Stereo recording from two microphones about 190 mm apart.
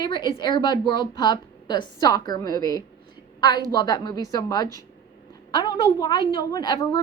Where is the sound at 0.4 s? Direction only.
20° left (ahead or behind).